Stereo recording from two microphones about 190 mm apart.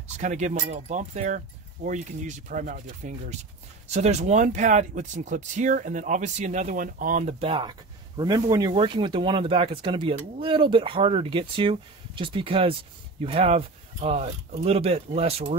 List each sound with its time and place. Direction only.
0.2 s speech: 40° right (ahead or behind)